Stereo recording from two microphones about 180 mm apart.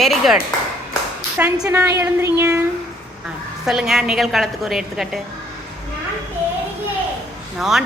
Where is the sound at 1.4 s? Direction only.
10° right (ahead or behind).